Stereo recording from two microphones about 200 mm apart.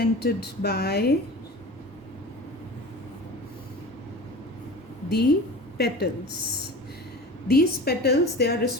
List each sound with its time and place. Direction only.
0.0 s a woman's voice: 50° left (ahead or behind)
5.0 s a woman's voice: 55° left (ahead or behind)
7.4 s a woman's voice: 50° left (ahead or behind)